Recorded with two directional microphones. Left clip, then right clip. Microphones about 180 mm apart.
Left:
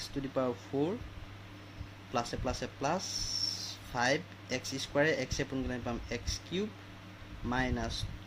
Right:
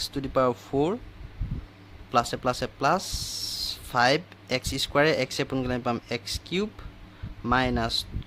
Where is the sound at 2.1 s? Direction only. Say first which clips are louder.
Right 10 dB; 45° right (ahead or behind).